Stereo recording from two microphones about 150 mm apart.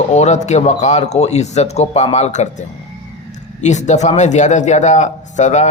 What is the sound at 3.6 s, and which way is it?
A man's voice, 50° left (ahead or behind).